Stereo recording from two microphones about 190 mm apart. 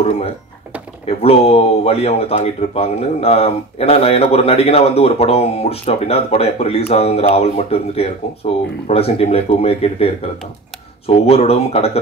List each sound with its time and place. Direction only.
1.0 s speech: 30° left (ahead or behind)